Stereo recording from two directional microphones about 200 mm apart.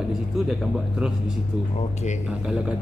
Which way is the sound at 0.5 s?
5° right (ahead or behind).